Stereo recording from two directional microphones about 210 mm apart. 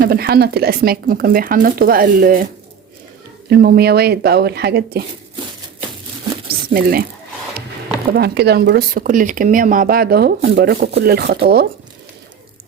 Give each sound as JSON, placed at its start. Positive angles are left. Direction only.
{"t": 0.0, "sound": "speech", "side_deg": -45}
{"t": 3.5, "sound": "speech", "side_deg": -50}
{"t": 6.5, "sound": "a sound", "side_deg": -45}
{"t": 8.1, "sound": "speech", "side_deg": -50}